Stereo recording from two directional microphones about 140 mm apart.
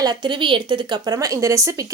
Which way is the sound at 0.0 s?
30° right (ahead or behind).